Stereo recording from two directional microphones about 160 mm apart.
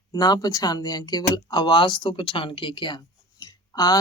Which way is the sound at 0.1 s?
25° left (ahead or behind).